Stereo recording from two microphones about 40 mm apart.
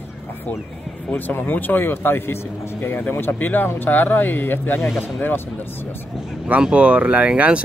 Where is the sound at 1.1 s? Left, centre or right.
Left.